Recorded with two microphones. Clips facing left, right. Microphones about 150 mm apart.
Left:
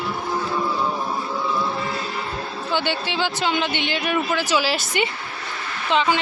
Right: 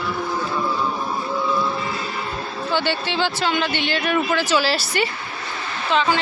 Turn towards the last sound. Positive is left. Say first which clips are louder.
# even
turn(degrees=15)  # may be behind; listen again after turning